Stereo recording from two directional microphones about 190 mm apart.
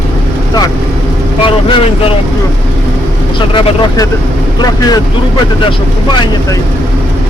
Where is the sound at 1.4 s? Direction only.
25° left (ahead or behind).